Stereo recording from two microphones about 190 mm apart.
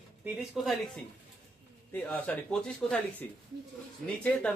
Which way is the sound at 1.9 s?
10° left (ahead or behind).